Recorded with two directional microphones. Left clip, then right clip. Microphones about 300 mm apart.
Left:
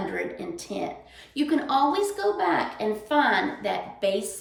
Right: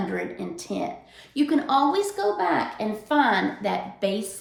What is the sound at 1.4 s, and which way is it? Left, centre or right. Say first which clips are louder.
A woman's voice: right 2 dB; centre.